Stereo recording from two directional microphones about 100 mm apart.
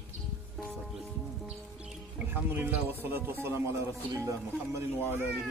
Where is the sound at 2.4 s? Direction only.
20° right (ahead or behind).